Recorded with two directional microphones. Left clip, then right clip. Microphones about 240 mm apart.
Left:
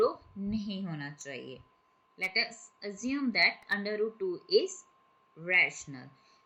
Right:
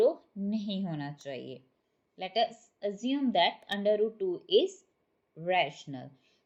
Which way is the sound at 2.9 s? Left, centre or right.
Centre.